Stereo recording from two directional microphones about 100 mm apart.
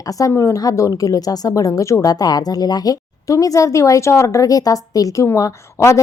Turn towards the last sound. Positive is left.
turn(degrees=30)  # may be behind; listen again after turning